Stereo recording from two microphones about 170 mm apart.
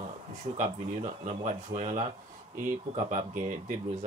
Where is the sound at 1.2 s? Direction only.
45° right (ahead or behind).